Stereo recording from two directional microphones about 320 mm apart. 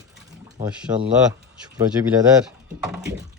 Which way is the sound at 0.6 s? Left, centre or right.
Centre.